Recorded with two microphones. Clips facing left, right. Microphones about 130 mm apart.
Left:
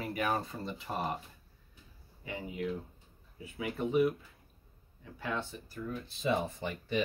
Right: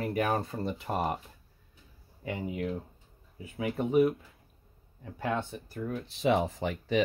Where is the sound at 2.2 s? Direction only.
50° right (ahead or behind).